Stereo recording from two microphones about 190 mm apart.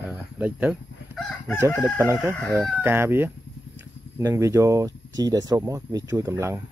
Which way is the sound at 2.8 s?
10° right (ahead or behind).